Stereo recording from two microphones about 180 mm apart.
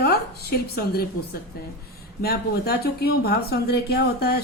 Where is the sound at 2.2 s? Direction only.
60° left (ahead or behind).